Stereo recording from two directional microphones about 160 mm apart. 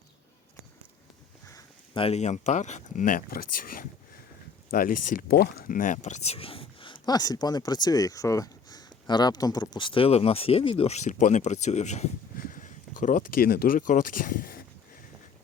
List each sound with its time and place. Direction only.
1.9 s speech: 40° left (ahead or behind); by 14.6 s 65° left (ahead or behind)